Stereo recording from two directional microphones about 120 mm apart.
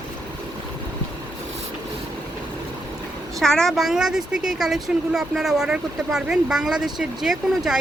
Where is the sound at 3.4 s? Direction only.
5° left (ahead or behind).